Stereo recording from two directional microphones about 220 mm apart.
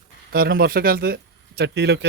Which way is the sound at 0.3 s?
45° right (ahead or behind).